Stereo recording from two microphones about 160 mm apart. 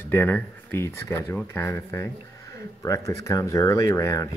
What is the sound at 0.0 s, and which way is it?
Speech, 10° left (ahead or behind).